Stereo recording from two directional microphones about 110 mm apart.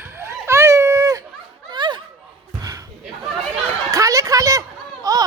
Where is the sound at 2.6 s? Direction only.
35° right (ahead or behind).